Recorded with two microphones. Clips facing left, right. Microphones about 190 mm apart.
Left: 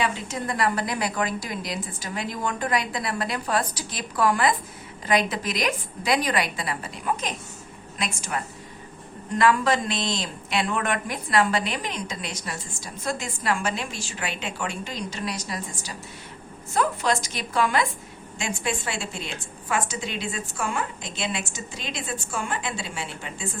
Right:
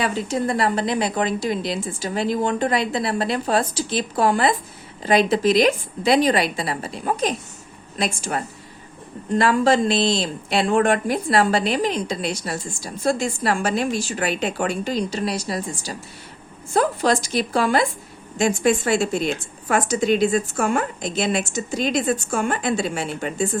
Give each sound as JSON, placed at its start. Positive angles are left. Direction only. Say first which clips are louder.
{"t": 0.0, "sound": "a woman's voice", "louder": "right 5 dB", "side_deg": -35}